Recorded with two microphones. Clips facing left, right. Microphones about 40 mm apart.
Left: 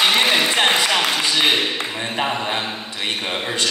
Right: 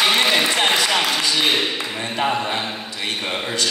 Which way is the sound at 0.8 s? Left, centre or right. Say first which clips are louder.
Left 1 dB; left.